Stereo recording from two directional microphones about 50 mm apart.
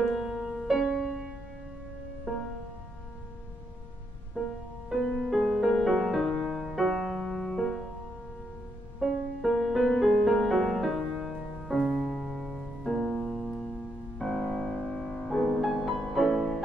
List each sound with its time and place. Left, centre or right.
0.2 s music: centre
4.4 s music: right
4.9 s music: centre
5.3 s music: centre
9.0 s music: centre
15.6 s music: centre